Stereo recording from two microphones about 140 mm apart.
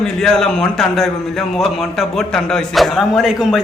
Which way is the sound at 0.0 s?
5° left (ahead or behind).